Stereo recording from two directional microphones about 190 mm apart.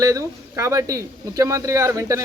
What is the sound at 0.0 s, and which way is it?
Speech, 15° right (ahead or behind).